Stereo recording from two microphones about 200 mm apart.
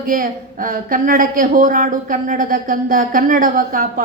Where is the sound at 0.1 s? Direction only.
45° right (ahead or behind).